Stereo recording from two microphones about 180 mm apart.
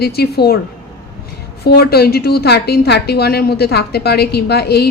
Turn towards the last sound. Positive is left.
turn(degrees=65)  # may be behind; listen again after turning